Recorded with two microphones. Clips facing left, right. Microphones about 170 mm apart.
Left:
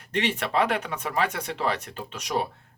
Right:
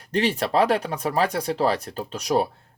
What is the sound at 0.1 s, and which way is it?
Speech, 35° right (ahead or behind).